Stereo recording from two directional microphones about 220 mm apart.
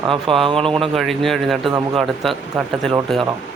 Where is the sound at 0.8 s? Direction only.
Centre (ahead or behind).